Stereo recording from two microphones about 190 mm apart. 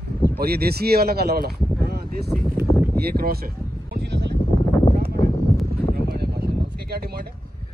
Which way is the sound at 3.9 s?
60° right (ahead or behind).